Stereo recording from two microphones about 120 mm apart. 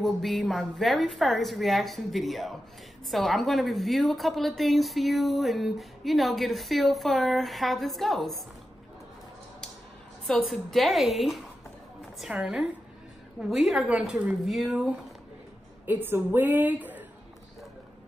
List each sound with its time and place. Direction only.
0.0 s a woman's voice: centre (ahead or behind)
10.2 s a woman's voice: centre (ahead or behind)
15.8 s a woman's voice: 15° right (ahead or behind)